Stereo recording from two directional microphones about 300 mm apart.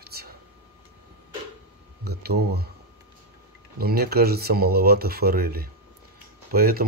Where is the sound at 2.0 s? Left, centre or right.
Right.